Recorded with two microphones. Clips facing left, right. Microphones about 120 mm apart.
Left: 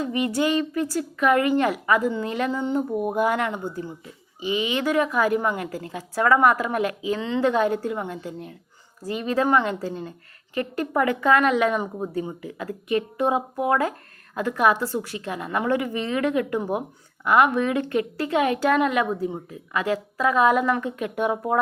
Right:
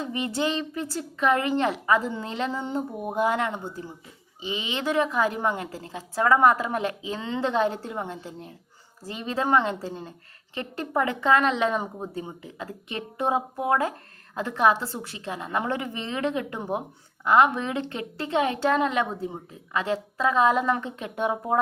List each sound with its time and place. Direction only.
0.0 s a woman's voice: 25° right (ahead or behind)